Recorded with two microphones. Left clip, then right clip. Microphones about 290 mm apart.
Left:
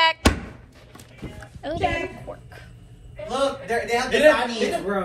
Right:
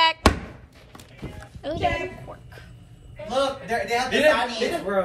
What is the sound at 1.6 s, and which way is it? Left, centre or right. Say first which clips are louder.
Speech: left 1 dB; centre.